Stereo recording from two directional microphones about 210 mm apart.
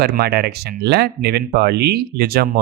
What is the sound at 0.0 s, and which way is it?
Speech, 50° right (ahead or behind).